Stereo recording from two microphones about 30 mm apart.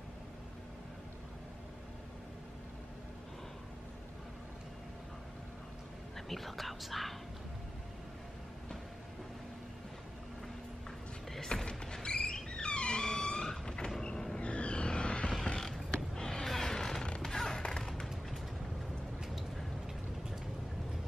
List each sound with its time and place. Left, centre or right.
6.1 s whispering: centre
11.6 s music: left
14.4 s vehicle: left
16.2 s a sound: centre
16.4 s music: centre
16.7 s a sound: centre
17.2 s music: centre